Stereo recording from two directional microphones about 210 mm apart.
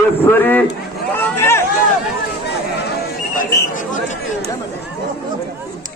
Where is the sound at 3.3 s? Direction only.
40° left (ahead or behind).